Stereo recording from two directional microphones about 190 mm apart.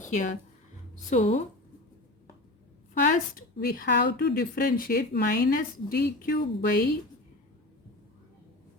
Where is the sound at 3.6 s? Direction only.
55° left (ahead or behind).